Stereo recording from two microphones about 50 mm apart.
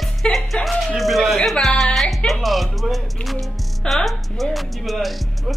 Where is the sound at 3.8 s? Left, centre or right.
Centre.